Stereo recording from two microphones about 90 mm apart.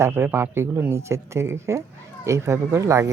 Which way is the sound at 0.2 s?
25° right (ahead or behind).